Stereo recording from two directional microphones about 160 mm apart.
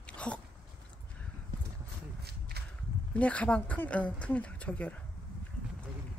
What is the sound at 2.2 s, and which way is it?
Walk, 90° right.